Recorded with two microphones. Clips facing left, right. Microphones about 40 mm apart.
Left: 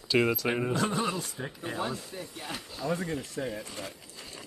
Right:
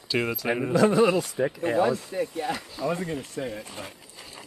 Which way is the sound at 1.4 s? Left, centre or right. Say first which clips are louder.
Right 11 dB; right.